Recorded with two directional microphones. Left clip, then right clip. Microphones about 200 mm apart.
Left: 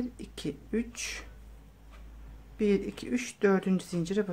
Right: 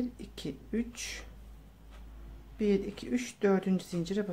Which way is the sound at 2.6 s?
15° left (ahead or behind).